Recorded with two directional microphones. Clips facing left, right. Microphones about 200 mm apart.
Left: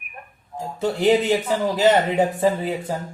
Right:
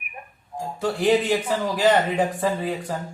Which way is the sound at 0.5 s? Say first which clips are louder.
Left 2 dB; 20° left (ahead or behind).